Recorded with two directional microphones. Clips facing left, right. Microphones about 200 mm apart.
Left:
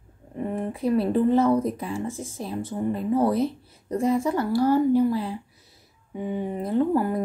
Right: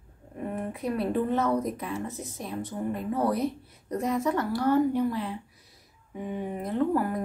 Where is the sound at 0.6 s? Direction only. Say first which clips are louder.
Left 6 dB; 30° left (ahead or behind).